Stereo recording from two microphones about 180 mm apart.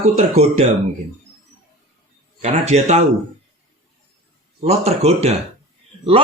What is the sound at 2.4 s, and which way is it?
Speech, 40° right (ahead or behind).